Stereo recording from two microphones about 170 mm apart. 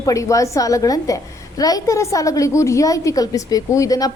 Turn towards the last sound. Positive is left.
turn(degrees=20)  # may be behind; listen again after turning